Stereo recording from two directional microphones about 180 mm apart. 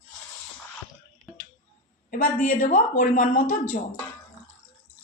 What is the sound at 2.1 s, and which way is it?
A woman's voice, 45° left (ahead or behind).